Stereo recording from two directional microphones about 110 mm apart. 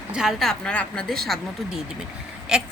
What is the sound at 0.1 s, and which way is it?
A woman's voice, 5° right (ahead or behind).